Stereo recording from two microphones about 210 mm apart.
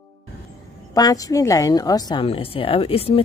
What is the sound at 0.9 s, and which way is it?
A woman's voice, 15° left (ahead or behind).